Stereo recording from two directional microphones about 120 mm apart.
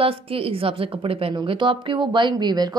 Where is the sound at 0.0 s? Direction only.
50° right (ahead or behind).